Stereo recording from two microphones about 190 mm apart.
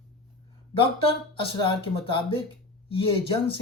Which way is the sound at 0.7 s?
30° left (ahead or behind).